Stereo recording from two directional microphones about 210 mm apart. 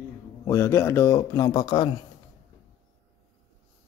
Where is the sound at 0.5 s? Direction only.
15° left (ahead or behind).